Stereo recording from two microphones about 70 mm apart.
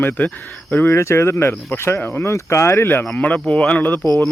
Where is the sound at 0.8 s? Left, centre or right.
Left.